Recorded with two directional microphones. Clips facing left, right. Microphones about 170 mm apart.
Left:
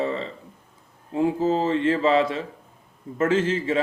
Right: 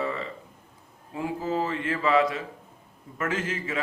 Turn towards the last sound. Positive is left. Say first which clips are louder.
# left 8 dB
turn(degrees=30)  # may be behind; listen again after turning